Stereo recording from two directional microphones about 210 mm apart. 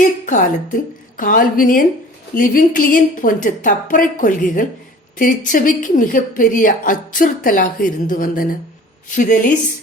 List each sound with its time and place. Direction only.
0.0 s a woman's voice: 40° left (ahead or behind)